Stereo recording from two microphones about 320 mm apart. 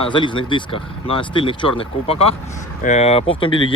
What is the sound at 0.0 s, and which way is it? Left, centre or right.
Speech, centre.